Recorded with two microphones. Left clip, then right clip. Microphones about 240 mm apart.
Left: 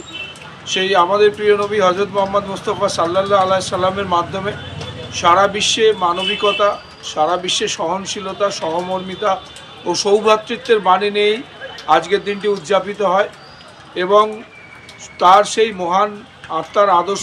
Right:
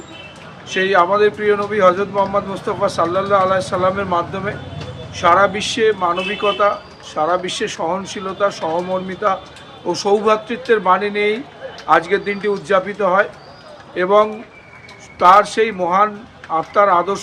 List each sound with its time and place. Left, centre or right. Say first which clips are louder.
0.7 s speech: even; centre